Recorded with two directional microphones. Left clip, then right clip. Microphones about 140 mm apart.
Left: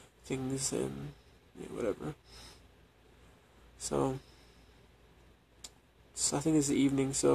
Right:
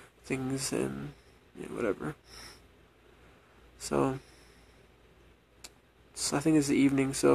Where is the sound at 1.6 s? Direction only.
10° right (ahead or behind).